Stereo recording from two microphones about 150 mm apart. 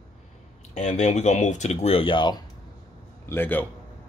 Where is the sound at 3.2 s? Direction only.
15° left (ahead or behind).